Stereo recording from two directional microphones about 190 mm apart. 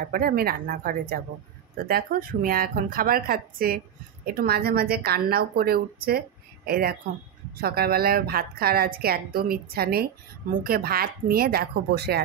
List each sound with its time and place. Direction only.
0.1 s a woman's voice: 50° right (ahead or behind)